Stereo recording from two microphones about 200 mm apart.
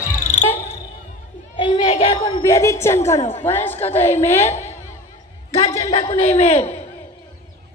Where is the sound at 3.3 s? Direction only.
10° left (ahead or behind).